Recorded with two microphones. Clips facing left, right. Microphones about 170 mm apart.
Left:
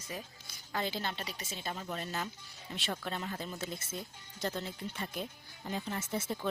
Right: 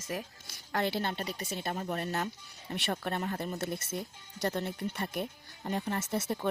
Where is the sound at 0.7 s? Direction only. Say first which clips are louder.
Right 5 dB; 65° right (ahead or behind); by 3.5 s 50° right (ahead or behind).